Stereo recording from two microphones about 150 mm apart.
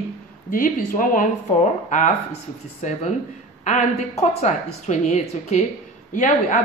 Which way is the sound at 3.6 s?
50° left (ahead or behind).